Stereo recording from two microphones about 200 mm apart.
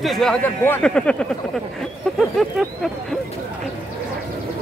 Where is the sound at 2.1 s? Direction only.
Centre (ahead or behind).